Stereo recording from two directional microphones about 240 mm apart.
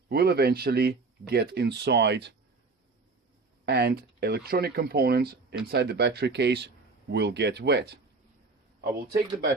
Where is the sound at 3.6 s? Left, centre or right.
Right.